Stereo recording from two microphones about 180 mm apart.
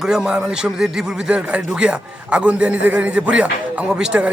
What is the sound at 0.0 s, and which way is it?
A man's voice, 5° right (ahead or behind).